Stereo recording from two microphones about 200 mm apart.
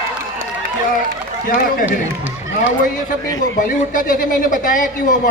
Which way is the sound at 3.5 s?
45° left (ahead or behind).